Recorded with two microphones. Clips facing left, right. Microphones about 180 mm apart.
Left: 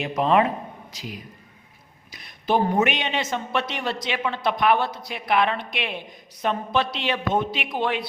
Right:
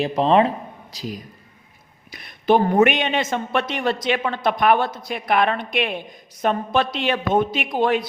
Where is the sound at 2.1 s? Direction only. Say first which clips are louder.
Right 5 dB; 60° right (ahead or behind); by 8.1 s 45° right (ahead or behind).